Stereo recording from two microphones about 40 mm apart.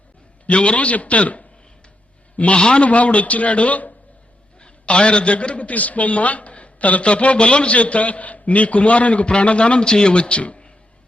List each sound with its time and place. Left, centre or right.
0.4 s a man's voice: left
4.6 s a man's voice: left